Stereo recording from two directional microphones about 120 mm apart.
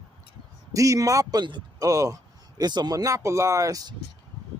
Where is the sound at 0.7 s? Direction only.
25° right (ahead or behind).